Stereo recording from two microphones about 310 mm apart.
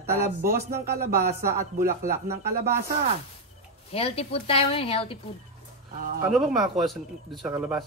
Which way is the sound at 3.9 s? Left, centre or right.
Centre.